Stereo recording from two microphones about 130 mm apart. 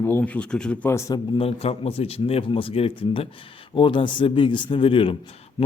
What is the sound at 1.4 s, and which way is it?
A man's voice, 50° left (ahead or behind).